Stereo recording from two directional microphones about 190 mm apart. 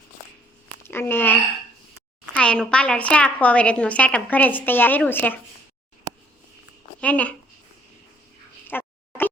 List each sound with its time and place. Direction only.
0.8 s a woman's voice: 10° left (ahead or behind)
7.0 s a woman's voice: 5° left (ahead or behind)
8.6 s a sound: 10° left (ahead or behind)